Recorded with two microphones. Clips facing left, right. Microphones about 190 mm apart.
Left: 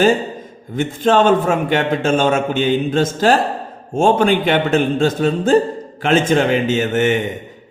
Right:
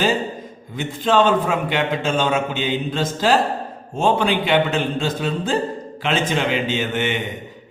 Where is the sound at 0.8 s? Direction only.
50° left (ahead or behind).